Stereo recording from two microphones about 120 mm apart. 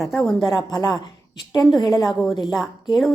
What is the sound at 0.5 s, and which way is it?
A woman's voice, 35° left (ahead or behind).